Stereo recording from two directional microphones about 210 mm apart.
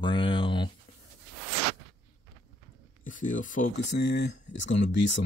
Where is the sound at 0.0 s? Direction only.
25° left (ahead or behind).